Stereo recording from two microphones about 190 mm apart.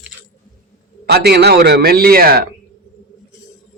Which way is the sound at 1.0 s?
60° right (ahead or behind).